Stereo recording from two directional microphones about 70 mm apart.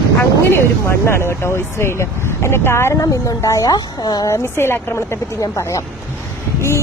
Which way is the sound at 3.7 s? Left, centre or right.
Left.